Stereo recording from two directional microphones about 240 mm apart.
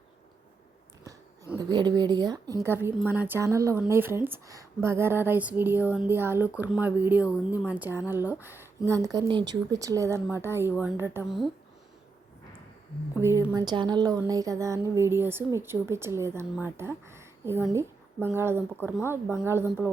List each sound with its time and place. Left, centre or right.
1.0 s a woman's voice: centre
13.1 s a woman's voice: centre